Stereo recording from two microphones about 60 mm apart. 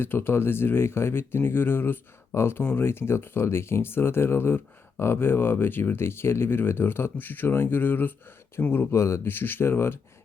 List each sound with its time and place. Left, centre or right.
0.0 s speech: left
9.2 s speech: left